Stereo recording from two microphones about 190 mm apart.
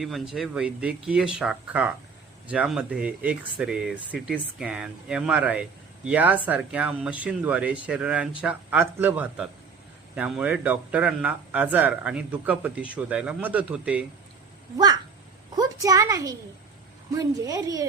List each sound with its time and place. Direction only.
0.0 s speech: centre (ahead or behind)
15.5 s a woman's voice: 20° right (ahead or behind)
17.4 s a woman's voice: 20° right (ahead or behind)